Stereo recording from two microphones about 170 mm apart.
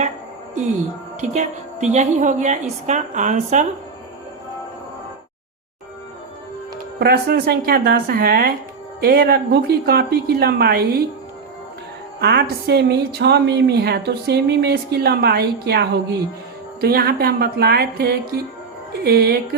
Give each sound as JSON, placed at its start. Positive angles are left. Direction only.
{"t": 1.2, "sound": "a woman's voice", "side_deg": -45}
{"t": 7.0, "sound": "a woman's voice", "side_deg": -65}
{"t": 12.2, "sound": "a woman's voice", "side_deg": -70}
{"t": 16.8, "sound": "a woman's voice", "side_deg": -60}